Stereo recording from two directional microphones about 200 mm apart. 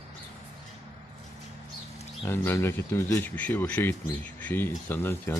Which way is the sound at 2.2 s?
10° left (ahead or behind).